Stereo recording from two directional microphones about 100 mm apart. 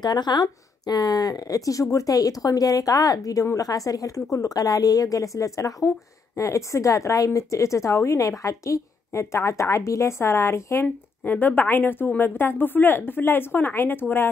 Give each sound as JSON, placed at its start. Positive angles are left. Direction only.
{"t": 0.0, "sound": "a woman's voice", "side_deg": 45}